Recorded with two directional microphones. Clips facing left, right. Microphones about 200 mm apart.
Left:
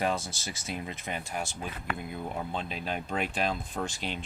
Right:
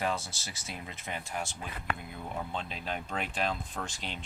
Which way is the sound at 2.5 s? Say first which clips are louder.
Left 3 dB; 10° left (ahead or behind).